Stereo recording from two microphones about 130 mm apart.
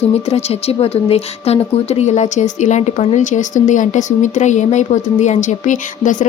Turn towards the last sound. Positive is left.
turn(degrees=75)  # may be behind; listen again after turning